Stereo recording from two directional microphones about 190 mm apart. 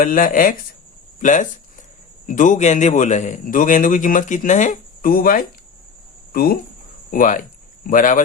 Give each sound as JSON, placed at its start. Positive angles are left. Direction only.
{"t": 0.0, "sound": "a man's voice", "side_deg": 45}